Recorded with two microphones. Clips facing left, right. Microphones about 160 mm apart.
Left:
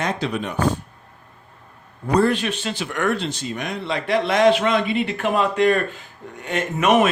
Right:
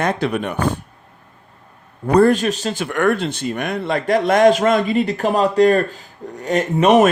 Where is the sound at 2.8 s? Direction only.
55° right (ahead or behind); by 7.0 s 35° right (ahead or behind).